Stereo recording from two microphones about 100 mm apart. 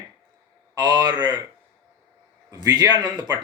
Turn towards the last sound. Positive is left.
turn(degrees=-40)  # may be behind; listen again after turning